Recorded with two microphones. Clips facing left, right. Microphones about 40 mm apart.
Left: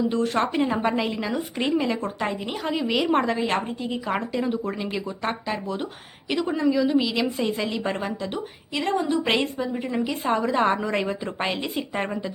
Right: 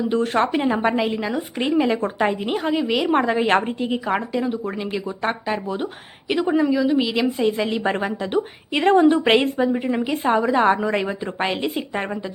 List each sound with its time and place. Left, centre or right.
0.3 s a woman's voice: centre
2.0 s a woman's voice: right
2.5 s a woman's voice: centre
3.3 s a woman's voice: right
4.1 s speech: centre
6.2 s a woman's voice: centre
6.7 s a woman's voice: centre; by 8.1 s right
8.2 s a woman's voice: right
9.2 s a woman's voice: right; by 12.0 s centre